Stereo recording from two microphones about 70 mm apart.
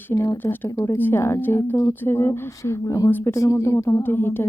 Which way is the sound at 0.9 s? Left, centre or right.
Left.